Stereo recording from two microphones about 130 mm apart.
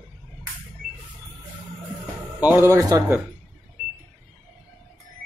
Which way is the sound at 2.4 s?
15° right (ahead or behind).